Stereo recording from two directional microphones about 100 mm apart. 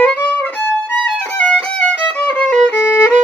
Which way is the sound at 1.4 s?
15° left (ahead or behind).